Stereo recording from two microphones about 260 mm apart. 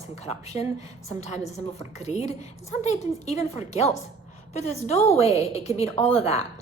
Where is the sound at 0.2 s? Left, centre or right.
Left.